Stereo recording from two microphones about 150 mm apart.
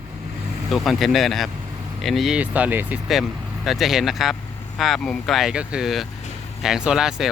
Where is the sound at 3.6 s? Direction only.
Centre (ahead or behind).